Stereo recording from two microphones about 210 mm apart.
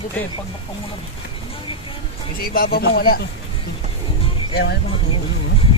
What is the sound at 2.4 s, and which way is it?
Speech, 45° left (ahead or behind).